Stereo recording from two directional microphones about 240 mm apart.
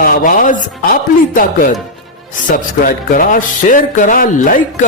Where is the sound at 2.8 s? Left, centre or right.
Left.